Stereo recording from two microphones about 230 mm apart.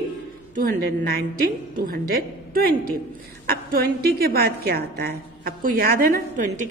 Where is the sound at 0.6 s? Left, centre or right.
Right.